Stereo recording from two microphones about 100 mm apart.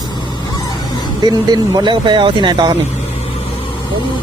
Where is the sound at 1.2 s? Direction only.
40° right (ahead or behind).